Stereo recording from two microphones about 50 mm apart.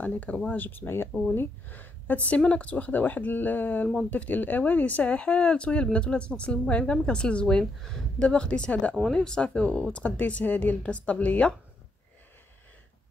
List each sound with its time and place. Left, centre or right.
0.0 s speech: left